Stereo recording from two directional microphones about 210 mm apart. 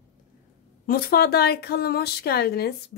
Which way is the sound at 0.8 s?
45° left (ahead or behind).